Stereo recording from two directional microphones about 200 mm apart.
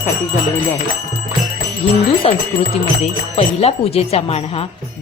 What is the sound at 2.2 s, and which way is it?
Speech, 30° left (ahead or behind).